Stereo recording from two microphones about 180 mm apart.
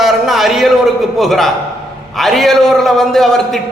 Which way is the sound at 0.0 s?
Centre (ahead or behind).